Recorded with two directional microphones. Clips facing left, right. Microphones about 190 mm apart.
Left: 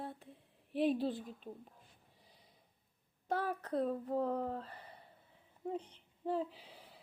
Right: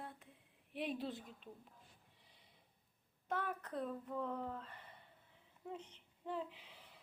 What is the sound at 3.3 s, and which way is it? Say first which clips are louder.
A woman's voice: left 6 dB; 35° left (ahead or behind).